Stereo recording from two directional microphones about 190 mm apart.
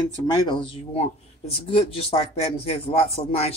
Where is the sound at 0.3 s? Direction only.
25° left (ahead or behind).